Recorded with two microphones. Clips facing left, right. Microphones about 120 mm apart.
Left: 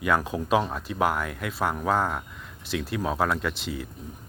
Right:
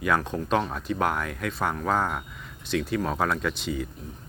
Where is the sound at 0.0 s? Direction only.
5° left (ahead or behind).